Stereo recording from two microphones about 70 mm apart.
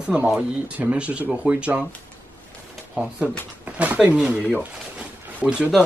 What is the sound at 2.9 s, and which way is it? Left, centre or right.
Speech, centre.